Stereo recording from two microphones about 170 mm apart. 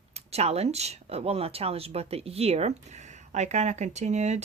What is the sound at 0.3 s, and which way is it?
Speech, 35° right (ahead or behind).